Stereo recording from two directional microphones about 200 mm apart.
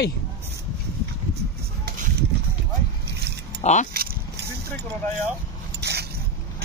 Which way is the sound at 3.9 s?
50° right (ahead or behind).